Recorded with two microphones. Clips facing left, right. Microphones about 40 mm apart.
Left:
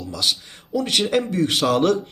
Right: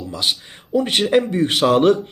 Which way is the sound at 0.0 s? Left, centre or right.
Right.